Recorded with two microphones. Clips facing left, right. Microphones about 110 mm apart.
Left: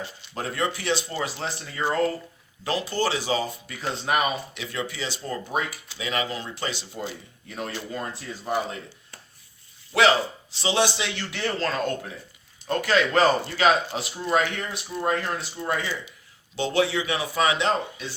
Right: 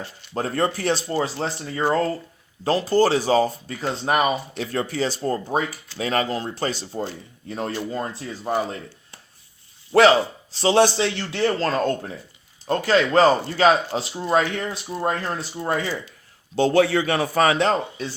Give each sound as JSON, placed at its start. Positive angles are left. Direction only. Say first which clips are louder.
{"t": 0.3, "sound": "speech", "louder": "right 5 dB", "side_deg": -40}
{"t": 9.9, "sound": "speech", "louder": "right 5 dB", "side_deg": -40}
{"t": 11.2, "sound": "speech", "louder": "right 3 dB", "side_deg": -30}
{"t": 16.6, "sound": "speech", "louder": "right 6 dB", "side_deg": -45}